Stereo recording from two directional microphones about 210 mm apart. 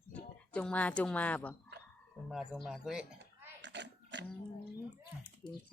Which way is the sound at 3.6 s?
55° right (ahead or behind).